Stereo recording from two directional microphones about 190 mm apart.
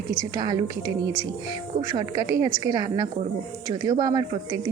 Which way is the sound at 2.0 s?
15° right (ahead or behind).